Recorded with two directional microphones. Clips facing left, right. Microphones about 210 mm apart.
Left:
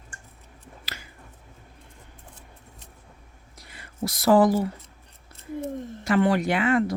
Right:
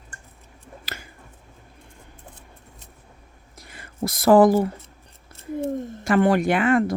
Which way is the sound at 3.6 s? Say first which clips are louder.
Right 3 dB; 50° right (ahead or behind).